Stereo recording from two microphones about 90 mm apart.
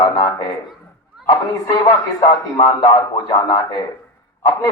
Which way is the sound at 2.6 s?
50° left (ahead or behind).